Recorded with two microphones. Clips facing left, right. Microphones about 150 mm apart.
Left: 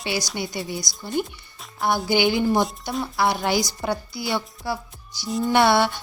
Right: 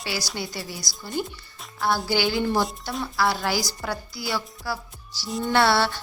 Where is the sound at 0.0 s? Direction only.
20° left (ahead or behind).